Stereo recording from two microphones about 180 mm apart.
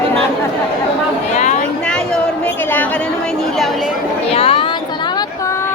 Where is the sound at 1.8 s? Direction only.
5° left (ahead or behind).